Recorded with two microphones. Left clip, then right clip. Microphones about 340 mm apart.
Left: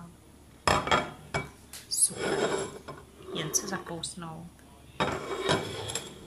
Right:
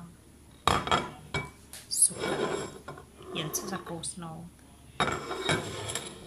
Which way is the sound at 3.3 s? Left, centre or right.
Centre.